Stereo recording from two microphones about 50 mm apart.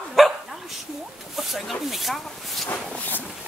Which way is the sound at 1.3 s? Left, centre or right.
Centre.